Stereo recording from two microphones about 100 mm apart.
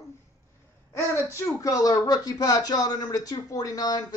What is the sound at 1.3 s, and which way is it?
Speech, 30° left (ahead or behind).